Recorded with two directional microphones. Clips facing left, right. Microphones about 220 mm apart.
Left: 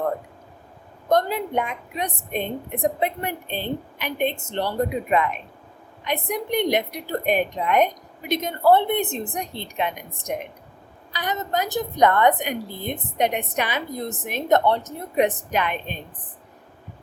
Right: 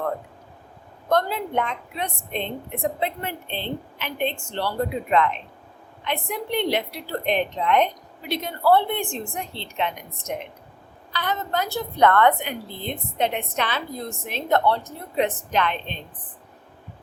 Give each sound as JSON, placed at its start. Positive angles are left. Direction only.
{"t": 1.1, "sound": "a woman's voice", "side_deg": 15}